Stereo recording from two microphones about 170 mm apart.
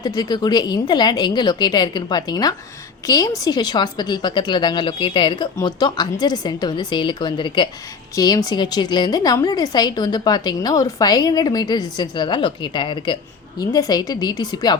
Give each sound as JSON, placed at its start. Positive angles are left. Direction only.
{"t": 0.0, "sound": "a woman's voice", "side_deg": 25}